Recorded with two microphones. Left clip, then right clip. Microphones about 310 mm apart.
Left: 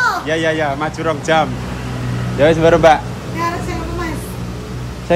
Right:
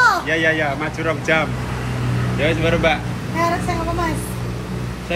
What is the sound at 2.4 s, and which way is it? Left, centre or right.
Speech, left.